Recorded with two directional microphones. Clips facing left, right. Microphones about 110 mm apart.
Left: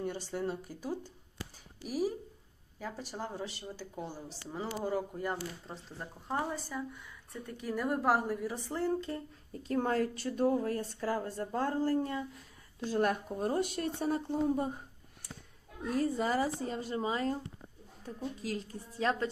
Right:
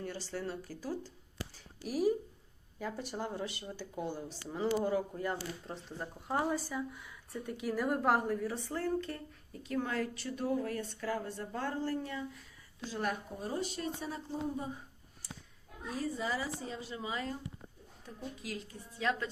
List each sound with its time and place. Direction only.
0.0 s speech: 20° left (ahead or behind)
1.8 s speech: 5° left (ahead or behind); by 9.6 s 25° left (ahead or behind)
9.6 s a woman's voice: 45° left (ahead or behind)
16.0 s a woman's voice: 50° left (ahead or behind)